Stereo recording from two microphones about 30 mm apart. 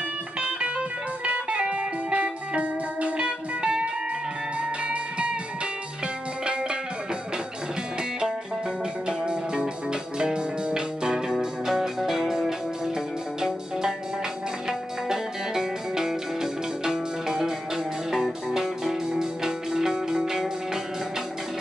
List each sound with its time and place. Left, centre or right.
0.4 s music: right
1.6 s music: right
2.5 s music: right
4.6 s music: right
6.4 s music: right
9.0 s music: right
11.3 s music: centre